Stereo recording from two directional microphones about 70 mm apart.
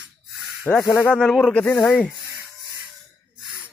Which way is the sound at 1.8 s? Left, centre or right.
Centre.